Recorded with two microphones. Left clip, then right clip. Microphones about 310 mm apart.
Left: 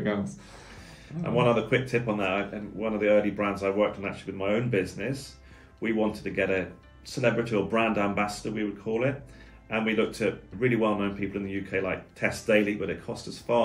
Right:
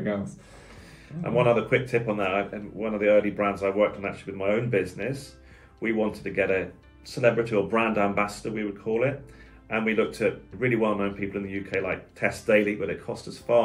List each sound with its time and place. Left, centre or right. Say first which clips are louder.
0.0 s speech: even; centre